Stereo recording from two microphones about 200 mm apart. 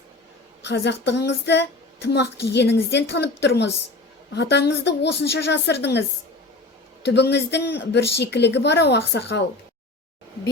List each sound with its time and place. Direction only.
0.6 s speech: 60° left (ahead or behind)